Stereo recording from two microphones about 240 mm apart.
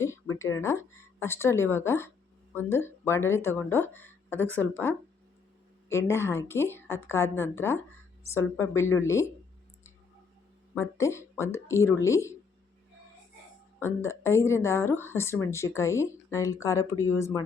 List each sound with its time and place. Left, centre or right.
0.3 s a woman's voice: centre
10.8 s a woman's voice: centre
13.7 s a woman's voice: centre